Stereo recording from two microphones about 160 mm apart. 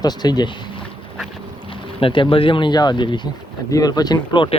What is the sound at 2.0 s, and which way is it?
Speech, 35° left (ahead or behind).